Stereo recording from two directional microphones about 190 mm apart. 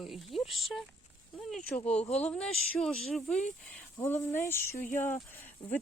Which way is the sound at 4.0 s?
10° left (ahead or behind).